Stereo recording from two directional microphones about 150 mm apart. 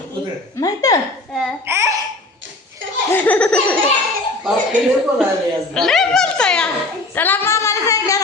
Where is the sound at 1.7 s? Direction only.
20° right (ahead or behind).